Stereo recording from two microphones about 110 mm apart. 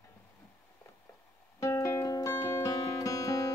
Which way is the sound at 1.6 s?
25° left (ahead or behind).